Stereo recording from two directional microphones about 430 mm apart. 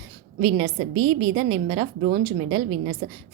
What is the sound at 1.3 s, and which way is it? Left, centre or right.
Speech, centre.